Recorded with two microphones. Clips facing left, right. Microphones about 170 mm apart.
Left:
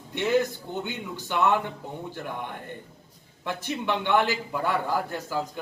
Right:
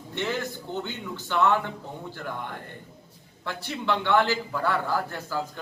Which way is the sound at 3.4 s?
15° left (ahead or behind).